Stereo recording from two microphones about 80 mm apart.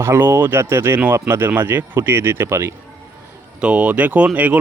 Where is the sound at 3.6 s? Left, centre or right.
Centre.